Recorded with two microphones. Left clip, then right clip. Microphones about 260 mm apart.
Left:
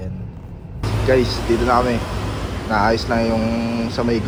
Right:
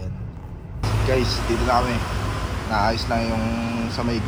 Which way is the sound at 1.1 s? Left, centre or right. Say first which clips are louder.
Left 6 dB; centre.